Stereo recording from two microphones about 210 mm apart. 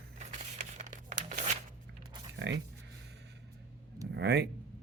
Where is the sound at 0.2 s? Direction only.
35° right (ahead or behind).